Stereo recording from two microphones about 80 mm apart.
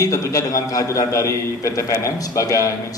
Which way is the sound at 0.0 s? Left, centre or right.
Left.